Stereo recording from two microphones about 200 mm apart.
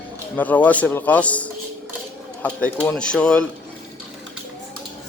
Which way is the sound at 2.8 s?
5° left (ahead or behind).